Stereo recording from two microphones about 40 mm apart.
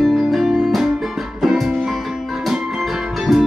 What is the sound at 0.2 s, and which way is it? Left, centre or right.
Music, centre.